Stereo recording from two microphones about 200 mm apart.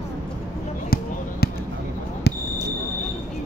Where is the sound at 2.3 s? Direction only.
55° left (ahead or behind).